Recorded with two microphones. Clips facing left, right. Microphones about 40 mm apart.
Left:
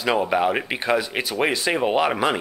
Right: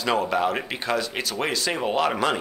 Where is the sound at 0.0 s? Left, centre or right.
Centre.